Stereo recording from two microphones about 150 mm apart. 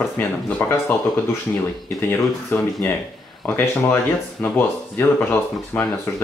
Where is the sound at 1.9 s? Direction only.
15° left (ahead or behind).